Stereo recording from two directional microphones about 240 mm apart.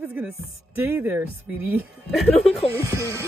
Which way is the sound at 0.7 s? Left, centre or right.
Centre.